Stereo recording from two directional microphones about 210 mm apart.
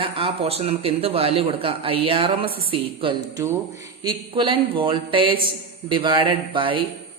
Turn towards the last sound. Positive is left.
turn(degrees=-25)  # may be behind; listen again after turning